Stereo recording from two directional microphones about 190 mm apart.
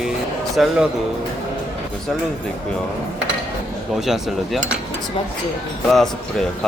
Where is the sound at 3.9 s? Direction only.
Centre (ahead or behind).